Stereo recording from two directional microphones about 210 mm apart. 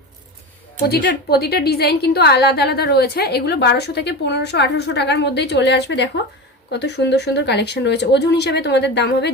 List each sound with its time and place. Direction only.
0.9 s a woman's voice: 50° left (ahead or behind)